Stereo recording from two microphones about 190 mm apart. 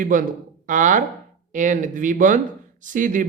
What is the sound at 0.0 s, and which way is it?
Speech, 45° right (ahead or behind).